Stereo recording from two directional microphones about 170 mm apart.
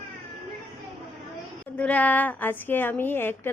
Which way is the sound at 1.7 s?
10° left (ahead or behind).